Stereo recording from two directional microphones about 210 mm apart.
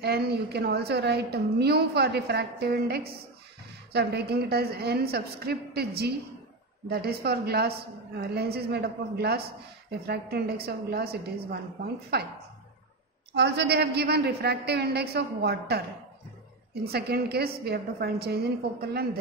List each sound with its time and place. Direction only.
0.0 s a woman's voice: 50° right (ahead or behind)
13.3 s a woman's voice: 55° right (ahead or behind)
16.8 s a woman's voice: 50° right (ahead or behind)